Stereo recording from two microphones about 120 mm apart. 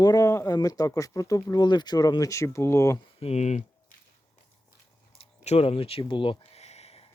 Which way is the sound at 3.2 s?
70° left (ahead or behind).